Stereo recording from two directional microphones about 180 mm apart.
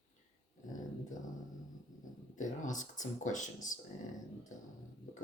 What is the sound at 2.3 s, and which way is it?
Speech, 45° left (ahead or behind).